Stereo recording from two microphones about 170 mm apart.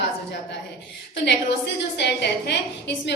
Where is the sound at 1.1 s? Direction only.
85° left.